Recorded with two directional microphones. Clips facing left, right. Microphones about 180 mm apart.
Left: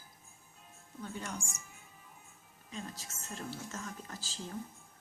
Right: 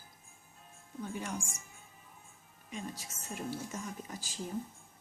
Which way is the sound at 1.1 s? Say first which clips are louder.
Right 3 dB; 10° right (ahead or behind).